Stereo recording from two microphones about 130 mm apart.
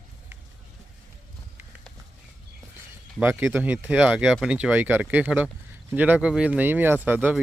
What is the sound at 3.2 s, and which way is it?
Speech, 20° right (ahead or behind).